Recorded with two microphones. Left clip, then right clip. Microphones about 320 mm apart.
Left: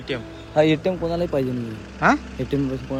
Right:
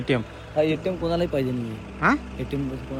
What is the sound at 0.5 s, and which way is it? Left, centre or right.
Speech, left.